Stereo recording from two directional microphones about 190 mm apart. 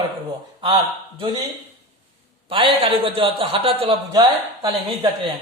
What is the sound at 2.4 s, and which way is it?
A man's voice, 25° right (ahead or behind).